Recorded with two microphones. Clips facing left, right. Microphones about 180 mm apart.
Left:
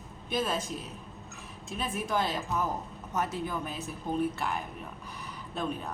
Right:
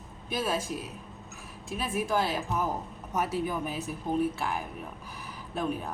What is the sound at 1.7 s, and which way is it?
A woman's voice, 5° right (ahead or behind).